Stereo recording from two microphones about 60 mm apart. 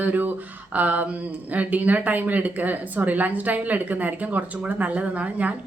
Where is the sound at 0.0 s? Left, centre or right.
Right.